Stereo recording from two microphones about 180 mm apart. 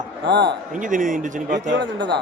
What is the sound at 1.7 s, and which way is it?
Speech, 85° right.